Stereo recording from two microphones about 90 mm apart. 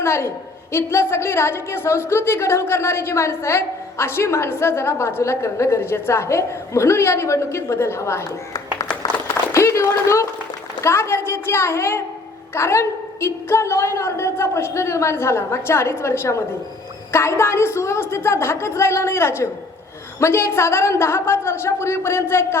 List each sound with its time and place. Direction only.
0.0 s a woman's voice: 30° left (ahead or behind)
9.2 s a sound: 35° left (ahead or behind)
10.8 s a woman's voice: 30° left (ahead or behind)